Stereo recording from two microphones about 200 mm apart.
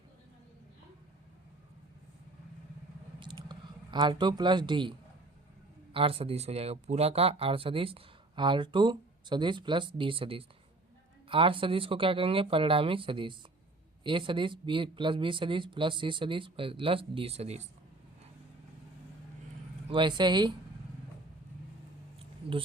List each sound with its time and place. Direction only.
3.2 s a sound: 20° right (ahead or behind)
5.9 s speech: 25° right (ahead or behind)
19.9 s speech: 25° right (ahead or behind)